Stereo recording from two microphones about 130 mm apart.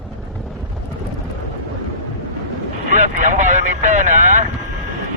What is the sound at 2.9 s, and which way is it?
Vehicle, 75° right (ahead or behind).